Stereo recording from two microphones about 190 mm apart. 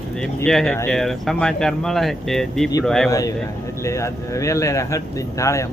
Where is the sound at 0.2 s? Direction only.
5° left (ahead or behind).